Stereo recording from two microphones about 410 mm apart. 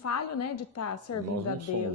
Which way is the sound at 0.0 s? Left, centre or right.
Left.